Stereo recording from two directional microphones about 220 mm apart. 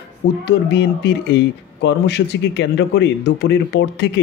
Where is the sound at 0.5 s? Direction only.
50° left (ahead or behind).